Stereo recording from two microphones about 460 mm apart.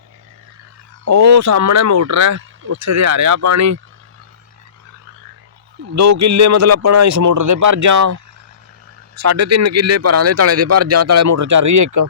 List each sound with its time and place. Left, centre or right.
1.0 s speech: right
5.9 s speech: right